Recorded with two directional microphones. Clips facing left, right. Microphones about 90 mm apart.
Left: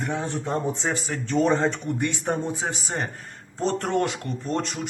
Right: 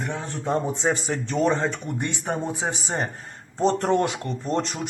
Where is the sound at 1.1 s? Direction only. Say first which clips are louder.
Left 1 dB; 20° right (ahead or behind).